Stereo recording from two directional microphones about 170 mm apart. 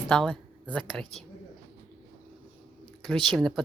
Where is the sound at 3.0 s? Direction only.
5° left (ahead or behind).